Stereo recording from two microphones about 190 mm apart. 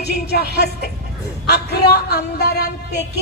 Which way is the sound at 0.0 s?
60° left (ahead or behind).